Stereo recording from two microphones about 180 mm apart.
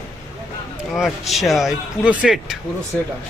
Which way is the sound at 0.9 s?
Centre (ahead or behind).